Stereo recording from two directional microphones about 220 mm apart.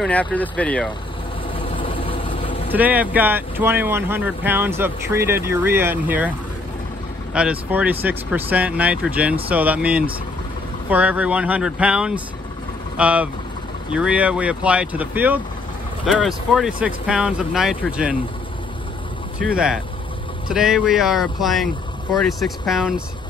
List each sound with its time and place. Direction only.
0.0 s speech: 5° left (ahead or behind)
1.8 s vehicle: 25° left (ahead or behind)
2.7 s speech: 5° right (ahead or behind)
7.3 s speech: 5° right (ahead or behind)
19.4 s speech: 5° right (ahead or behind)